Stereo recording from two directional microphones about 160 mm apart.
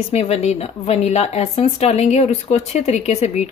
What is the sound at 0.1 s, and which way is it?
Speech, 40° left (ahead or behind).